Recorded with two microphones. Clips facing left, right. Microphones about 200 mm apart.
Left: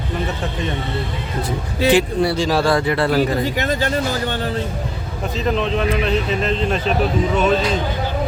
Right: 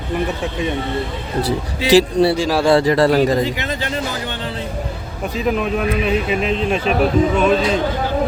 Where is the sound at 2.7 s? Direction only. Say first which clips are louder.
Right 4 dB; 35° right (ahead or behind).